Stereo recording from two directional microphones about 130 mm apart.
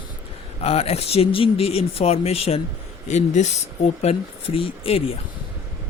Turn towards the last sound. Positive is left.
turn(degrees=50)  # may be behind; listen again after turning